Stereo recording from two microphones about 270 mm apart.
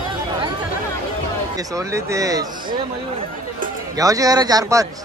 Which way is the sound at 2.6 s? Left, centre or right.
Right.